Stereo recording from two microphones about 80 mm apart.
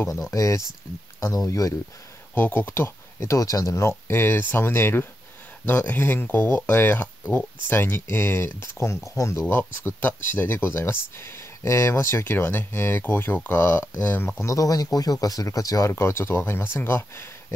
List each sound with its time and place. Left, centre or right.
0.2 s speech: left
2.3 s speech: left
9.5 s speech: left
14.4 s speech: left